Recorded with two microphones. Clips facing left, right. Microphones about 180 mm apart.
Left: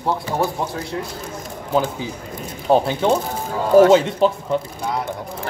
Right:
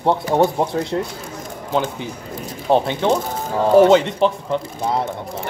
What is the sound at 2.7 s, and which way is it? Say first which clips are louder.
Speech: left 1 dB; 5° left (ahead or behind).